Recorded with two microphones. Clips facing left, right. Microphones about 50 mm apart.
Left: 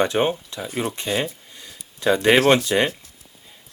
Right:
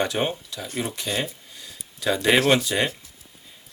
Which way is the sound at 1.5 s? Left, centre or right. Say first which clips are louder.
Even; left.